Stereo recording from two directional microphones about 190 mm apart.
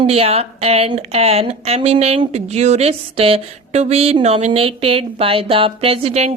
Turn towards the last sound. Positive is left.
turn(degrees=-30)  # may be behind; listen again after turning